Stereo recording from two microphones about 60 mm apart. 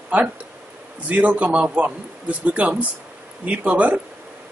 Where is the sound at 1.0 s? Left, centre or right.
Right.